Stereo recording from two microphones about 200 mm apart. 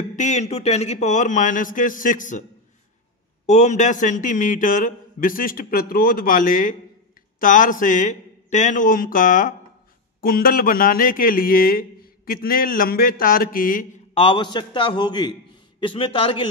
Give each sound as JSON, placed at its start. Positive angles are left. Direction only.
{"t": 0.1, "sound": "a man's voice", "side_deg": 35}
{"t": 3.4, "sound": "a man's voice", "side_deg": 35}
{"t": 14.1, "sound": "a man's voice", "side_deg": 25}